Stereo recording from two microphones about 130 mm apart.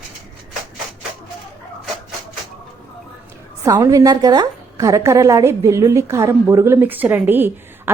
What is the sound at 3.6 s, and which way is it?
A woman's voice, 25° right (ahead or behind).